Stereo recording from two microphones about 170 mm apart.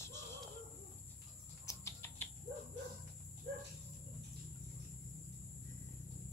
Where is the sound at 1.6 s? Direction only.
15° left (ahead or behind).